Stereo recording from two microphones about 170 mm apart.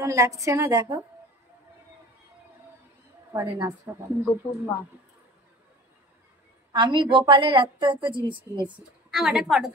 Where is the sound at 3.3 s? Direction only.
15° right (ahead or behind).